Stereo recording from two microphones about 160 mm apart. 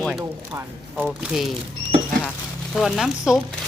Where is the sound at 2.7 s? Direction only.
Centre (ahead or behind).